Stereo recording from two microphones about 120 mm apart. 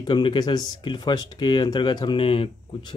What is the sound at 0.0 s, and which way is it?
Speech, 40° left (ahead or behind).